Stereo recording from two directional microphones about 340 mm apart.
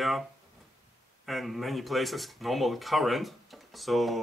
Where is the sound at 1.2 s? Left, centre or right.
Centre.